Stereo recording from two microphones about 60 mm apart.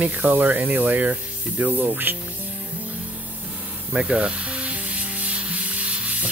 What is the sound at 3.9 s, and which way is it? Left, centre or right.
Music, centre.